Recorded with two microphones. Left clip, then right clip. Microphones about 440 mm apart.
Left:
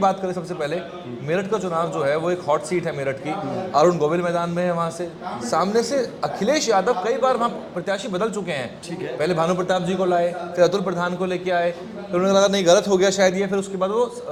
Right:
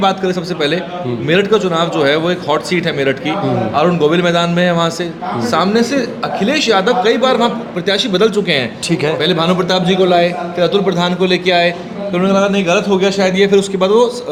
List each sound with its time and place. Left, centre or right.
0.0 s a man's voice: centre
3.8 s a man's voice: left
12.3 s a man's voice: left
13.4 s a man's voice: centre